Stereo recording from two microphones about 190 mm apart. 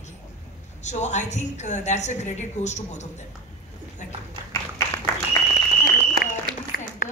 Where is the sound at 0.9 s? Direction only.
35° left (ahead or behind).